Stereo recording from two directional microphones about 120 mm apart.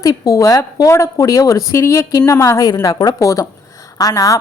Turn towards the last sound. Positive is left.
turn(degrees=30)  # may be behind; listen again after turning